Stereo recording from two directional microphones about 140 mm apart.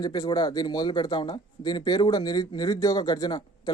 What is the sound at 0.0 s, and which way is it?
Speech, 30° left (ahead or behind).